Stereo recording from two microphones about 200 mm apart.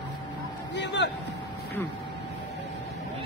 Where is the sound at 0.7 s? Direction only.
60° left (ahead or behind).